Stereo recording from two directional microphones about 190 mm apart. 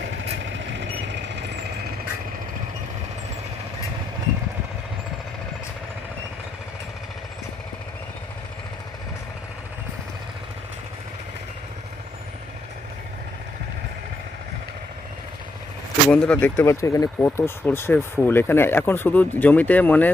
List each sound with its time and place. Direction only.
0.2 s vehicle: 75° right (ahead or behind)
16.0 s speech: 5° left (ahead or behind)